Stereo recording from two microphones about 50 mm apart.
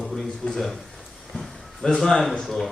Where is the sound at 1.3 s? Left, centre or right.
Centre.